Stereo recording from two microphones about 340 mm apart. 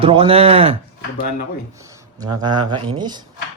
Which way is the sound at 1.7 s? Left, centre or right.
Centre.